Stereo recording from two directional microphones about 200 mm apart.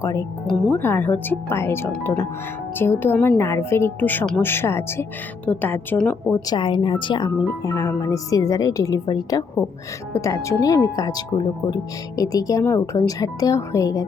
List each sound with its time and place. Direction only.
0.0 s speech: 15° left (ahead or behind)
6.6 s a woman's voice: 25° left (ahead or behind)